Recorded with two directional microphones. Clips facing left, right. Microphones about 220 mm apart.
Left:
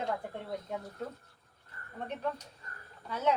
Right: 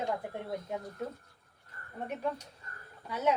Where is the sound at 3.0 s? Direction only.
10° right (ahead or behind).